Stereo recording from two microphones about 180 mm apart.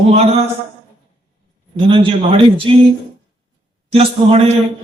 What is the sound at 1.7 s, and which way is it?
Speech, 30° right (ahead or behind).